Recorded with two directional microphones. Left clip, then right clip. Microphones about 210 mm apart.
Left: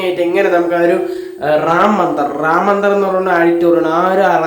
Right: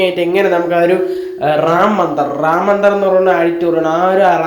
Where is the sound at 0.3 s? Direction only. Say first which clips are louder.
Even; 10° right (ahead or behind).